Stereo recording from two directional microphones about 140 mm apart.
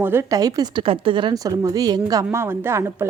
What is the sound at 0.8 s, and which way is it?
A woman's voice, 40° right (ahead or behind).